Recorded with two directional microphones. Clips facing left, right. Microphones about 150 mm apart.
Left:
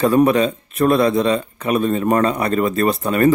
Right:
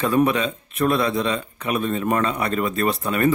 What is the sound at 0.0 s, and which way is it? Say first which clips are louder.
Speech: left 5 dB; 40° left (ahead or behind).